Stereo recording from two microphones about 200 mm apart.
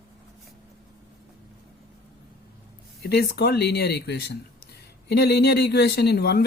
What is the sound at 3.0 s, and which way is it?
Speech, 55° left (ahead or behind).